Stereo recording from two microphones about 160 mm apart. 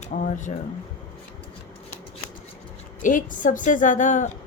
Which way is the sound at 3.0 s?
55° left (ahead or behind).